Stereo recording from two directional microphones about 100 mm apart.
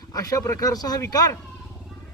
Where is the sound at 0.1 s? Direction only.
35° left (ahead or behind).